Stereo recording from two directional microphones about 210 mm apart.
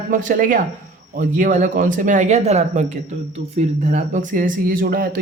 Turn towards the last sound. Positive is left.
turn(degrees=-45)  # may be behind; listen again after turning